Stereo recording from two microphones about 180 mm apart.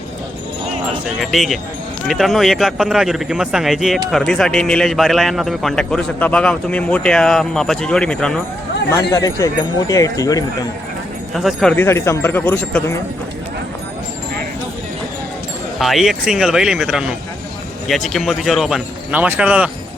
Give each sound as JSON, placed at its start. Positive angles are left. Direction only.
{"t": 1.2, "sound": "a man's voice", "side_deg": 0}
{"t": 8.9, "sound": "speech", "side_deg": 15}
{"t": 11.3, "sound": "speech", "side_deg": 0}
{"t": 15.8, "sound": "a man's voice", "side_deg": 0}